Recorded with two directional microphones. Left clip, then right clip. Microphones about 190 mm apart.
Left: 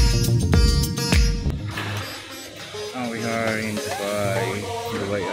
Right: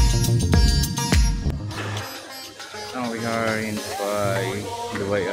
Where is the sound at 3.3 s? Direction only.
Centre (ahead or behind).